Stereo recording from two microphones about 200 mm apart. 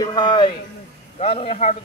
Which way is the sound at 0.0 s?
20° left (ahead or behind).